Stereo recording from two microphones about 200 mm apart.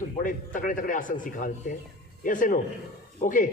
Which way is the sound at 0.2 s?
40° left (ahead or behind).